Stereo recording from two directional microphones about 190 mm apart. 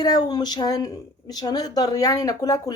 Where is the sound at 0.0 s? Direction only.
20° left (ahead or behind).